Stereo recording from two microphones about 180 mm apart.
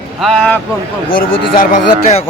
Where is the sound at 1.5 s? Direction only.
40° left (ahead or behind).